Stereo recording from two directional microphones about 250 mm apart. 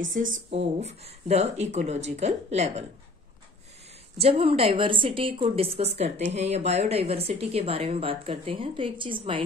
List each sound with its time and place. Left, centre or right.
0.5 s a woman's voice: right
4.2 s a woman's voice: right